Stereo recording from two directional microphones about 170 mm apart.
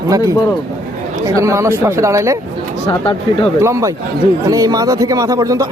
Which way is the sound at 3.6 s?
15° right (ahead or behind).